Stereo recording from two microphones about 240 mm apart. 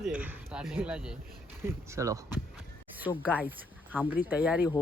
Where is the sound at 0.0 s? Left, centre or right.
Centre.